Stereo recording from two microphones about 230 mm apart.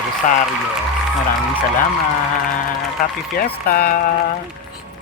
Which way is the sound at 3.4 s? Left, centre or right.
Left.